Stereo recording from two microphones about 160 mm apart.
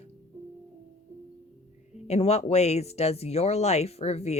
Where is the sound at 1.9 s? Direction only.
40° left (ahead or behind).